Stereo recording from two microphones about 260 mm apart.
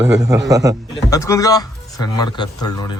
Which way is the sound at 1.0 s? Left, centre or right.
Centre.